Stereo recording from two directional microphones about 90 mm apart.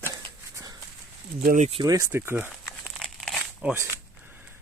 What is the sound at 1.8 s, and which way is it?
Speech, 55° right (ahead or behind).